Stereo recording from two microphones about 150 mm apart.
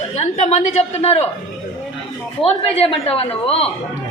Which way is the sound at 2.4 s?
40° left (ahead or behind).